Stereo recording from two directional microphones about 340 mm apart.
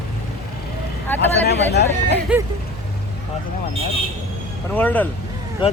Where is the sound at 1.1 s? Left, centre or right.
Centre.